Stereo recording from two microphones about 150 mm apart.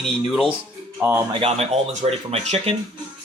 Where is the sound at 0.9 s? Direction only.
15° right (ahead or behind).